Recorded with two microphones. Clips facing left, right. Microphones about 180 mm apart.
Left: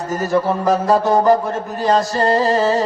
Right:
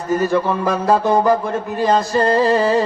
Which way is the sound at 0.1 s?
40° left (ahead or behind).